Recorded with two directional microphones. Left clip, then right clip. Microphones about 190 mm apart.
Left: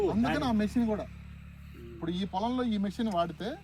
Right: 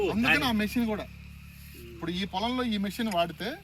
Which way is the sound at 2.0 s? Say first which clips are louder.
Right 1 dB; centre (ahead or behind).